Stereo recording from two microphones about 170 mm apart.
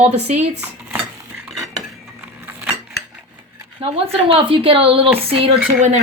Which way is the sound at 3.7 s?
30° right (ahead or behind).